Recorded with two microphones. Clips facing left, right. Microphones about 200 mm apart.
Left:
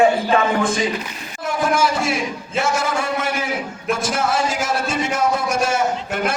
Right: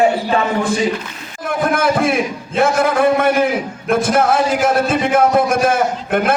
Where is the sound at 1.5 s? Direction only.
55° right (ahead or behind).